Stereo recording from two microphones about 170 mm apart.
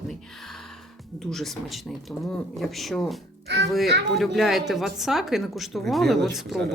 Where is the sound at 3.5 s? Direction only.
90° right.